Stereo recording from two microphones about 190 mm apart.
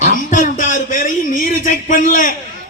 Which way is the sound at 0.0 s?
45° left (ahead or behind).